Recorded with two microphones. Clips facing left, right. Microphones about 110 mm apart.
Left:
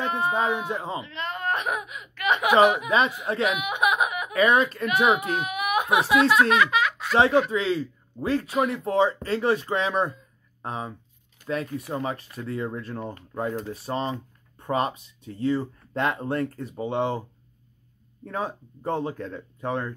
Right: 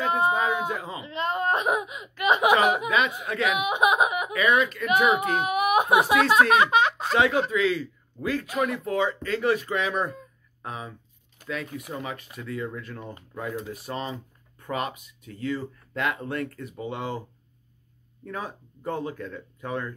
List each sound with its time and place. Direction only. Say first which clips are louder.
0.0 s a sound: right 3 dB; 25° right (ahead or behind)
0.3 s speech: even; 30° left (ahead or behind)
1.0 s speech: right 4 dB; 25° right (ahead or behind)
2.9 s speech: left 2 dB; 30° left (ahead or behind)
3.5 s speech: right 2 dB; 25° right (ahead or behind)
4.3 s speech: left 2 dB; 30° left (ahead or behind)
5.2 s a child's voice: right 4 dB; 30° right (ahead or behind)
7.2 s speech: left 3 dB; 30° left (ahead or behind)
18.2 s speech: left 4 dB; 30° left (ahead or behind)